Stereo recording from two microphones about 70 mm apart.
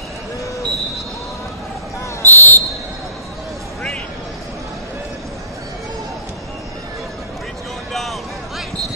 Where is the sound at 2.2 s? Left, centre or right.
Left.